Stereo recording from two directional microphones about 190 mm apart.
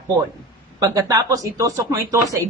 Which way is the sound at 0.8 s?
20° right (ahead or behind).